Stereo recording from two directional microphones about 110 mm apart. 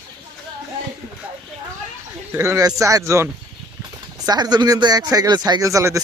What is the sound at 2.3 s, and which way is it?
Speech, 30° right (ahead or behind).